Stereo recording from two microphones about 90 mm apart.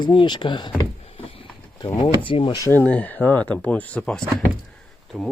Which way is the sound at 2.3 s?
70° left (ahead or behind).